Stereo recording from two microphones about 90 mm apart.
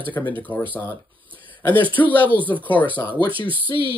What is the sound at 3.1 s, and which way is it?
Speech, 65° right (ahead or behind).